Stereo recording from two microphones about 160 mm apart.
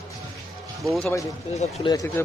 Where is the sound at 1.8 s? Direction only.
20° left (ahead or behind).